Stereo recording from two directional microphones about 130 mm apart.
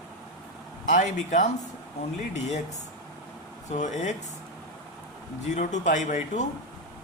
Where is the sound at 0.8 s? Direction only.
65° left (ahead or behind).